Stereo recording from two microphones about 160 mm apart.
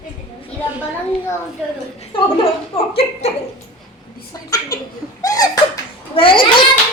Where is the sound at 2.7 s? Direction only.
35° left (ahead or behind).